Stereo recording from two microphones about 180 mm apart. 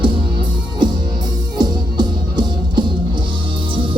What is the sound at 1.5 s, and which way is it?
Music, 25° right (ahead or behind).